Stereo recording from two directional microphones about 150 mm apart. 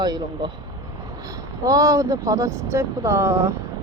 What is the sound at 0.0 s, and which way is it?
Speech, 25° right (ahead or behind).